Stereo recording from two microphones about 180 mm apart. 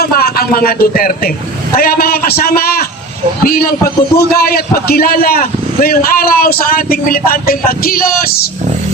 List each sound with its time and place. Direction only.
0.0 s a man's voice: 60° left (ahead or behind)